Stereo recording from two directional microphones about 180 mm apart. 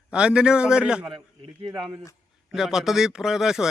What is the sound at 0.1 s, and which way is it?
Speech, 5° right (ahead or behind).